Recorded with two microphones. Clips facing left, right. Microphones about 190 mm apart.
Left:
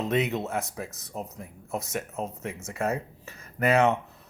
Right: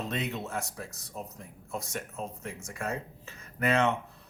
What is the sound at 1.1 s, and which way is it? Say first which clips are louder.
Speech: left 4 dB; 65° left (ahead or behind).